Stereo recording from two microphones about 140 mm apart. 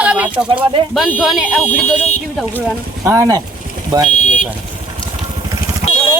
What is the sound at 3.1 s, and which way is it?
Speech, 25° right (ahead or behind).